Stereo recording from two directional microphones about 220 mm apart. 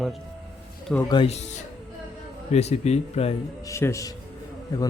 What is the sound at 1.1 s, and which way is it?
Speech, 25° left (ahead or behind).